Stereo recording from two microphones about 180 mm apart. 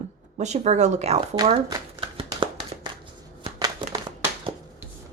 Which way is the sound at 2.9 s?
25° right (ahead or behind).